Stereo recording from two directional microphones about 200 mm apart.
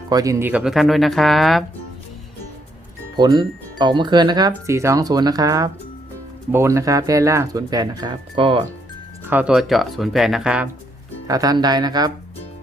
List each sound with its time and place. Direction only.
0.1 s speech: 15° right (ahead or behind); by 1.6 s centre (ahead or behind)
3.2 s speech: 20° right (ahead or behind)
9.3 s speech: 5° right (ahead or behind)
11.3 s speech: 20° right (ahead or behind)